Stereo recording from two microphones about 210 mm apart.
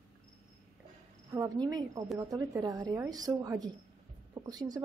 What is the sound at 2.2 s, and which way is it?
Speech, 15° right (ahead or behind).